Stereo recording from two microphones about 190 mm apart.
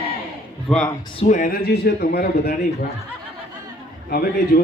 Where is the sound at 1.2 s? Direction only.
40° left (ahead or behind); by 2.5 s 55° left (ahead or behind).